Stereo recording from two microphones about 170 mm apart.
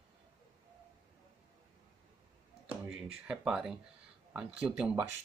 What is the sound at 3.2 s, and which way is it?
Speech, 5° right (ahead or behind).